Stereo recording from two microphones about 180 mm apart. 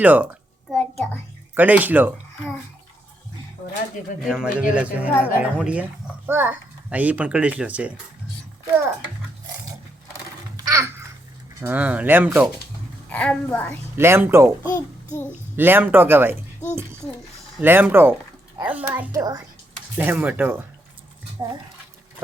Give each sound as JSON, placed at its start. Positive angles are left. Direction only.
{"t": 0.0, "sound": "a child's voice", "side_deg": -10}
{"t": 0.7, "sound": "a sound", "side_deg": 5}
{"t": 1.5, "sound": "a child's voice", "side_deg": -10}
{"t": 4.3, "sound": "a child's voice", "side_deg": -5}
{"t": 10.7, "sound": "babbling", "side_deg": -15}
{"t": 11.6, "sound": "a child's voice", "side_deg": -10}
{"t": 13.1, "sound": "a woman's voice", "side_deg": 5}
{"t": 13.9, "sound": "a child's voice", "side_deg": -15}
{"t": 17.6, "sound": "a child's voice", "side_deg": -10}
{"t": 19.1, "sound": "a child's voice", "side_deg": -20}
{"t": 20.0, "sound": "a child's voice", "side_deg": -10}